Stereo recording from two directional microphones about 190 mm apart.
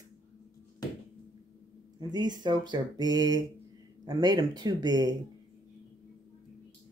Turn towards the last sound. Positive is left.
turn(degrees=-20)  # may be behind; listen again after turning